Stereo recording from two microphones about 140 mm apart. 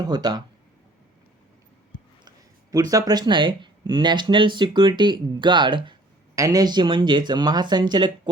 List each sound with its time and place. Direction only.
0.0 s speech: 30° right (ahead or behind)
2.7 s speech: 25° right (ahead or behind)